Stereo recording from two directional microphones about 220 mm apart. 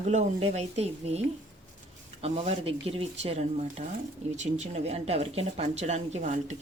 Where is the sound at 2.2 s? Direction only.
30° right (ahead or behind).